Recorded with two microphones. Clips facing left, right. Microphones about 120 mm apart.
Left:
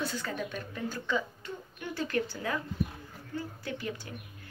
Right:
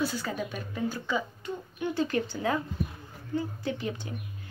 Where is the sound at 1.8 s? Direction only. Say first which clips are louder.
Right 4 dB; 20° right (ahead or behind).